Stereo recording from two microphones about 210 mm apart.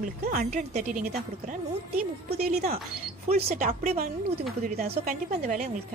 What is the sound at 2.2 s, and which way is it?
Speech, 50° right (ahead or behind).